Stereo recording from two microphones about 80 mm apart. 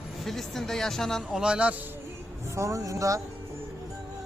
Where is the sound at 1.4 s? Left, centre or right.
Centre.